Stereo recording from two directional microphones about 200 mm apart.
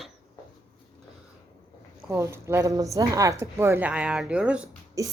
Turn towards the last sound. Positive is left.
turn(degrees=-15)  # may be behind; listen again after turning